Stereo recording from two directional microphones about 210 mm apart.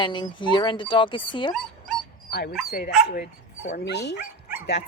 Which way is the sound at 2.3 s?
50° left (ahead or behind).